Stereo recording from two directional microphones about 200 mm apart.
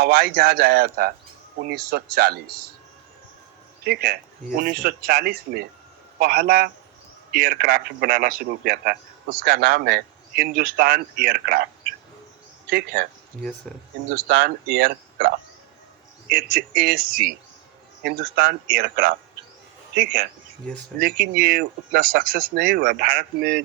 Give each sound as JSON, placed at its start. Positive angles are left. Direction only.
{"t": 0.0, "sound": "a man's voice", "side_deg": -45}
{"t": 3.8, "sound": "a man's voice", "side_deg": -50}
{"t": 14.3, "sound": "a man's voice", "side_deg": -50}
{"t": 16.3, "sound": "a man's voice", "side_deg": -45}